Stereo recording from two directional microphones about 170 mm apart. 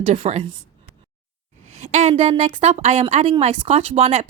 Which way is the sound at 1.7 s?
45° right (ahead or behind).